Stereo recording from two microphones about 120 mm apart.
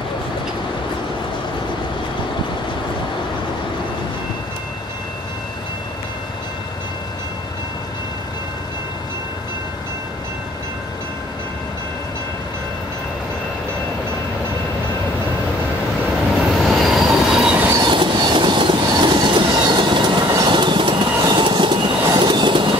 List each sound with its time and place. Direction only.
16.6 s train: centre (ahead or behind)
17.7 s train: 40° right (ahead or behind)